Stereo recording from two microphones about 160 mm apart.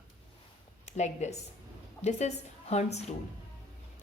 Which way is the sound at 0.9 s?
45° left (ahead or behind).